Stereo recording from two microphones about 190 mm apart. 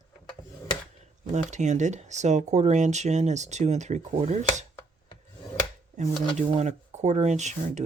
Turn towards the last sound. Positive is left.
turn(degrees=-35)  # may be behind; listen again after turning